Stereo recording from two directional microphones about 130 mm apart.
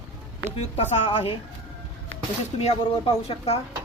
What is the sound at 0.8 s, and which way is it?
Speech, 55° left (ahead or behind).